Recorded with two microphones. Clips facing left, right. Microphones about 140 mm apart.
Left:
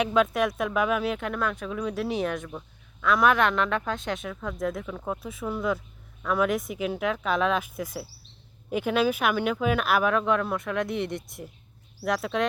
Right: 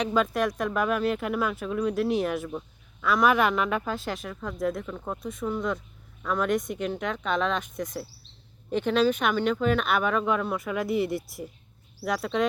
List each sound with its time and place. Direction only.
0.0 s speech: centre (ahead or behind)